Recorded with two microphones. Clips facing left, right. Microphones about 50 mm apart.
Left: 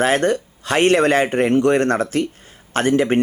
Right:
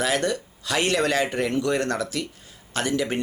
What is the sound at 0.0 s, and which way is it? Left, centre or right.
Speech, left.